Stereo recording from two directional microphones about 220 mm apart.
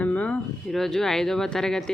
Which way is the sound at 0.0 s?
5° left (ahead or behind).